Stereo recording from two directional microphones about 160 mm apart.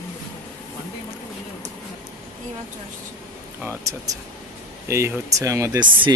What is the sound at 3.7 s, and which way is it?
Speech, 20° right (ahead or behind).